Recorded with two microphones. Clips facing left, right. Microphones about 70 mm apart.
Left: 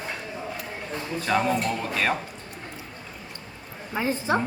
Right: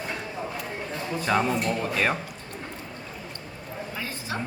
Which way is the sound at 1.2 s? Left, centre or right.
Centre.